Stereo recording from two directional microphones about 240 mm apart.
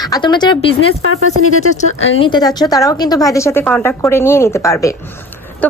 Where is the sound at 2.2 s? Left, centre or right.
Centre.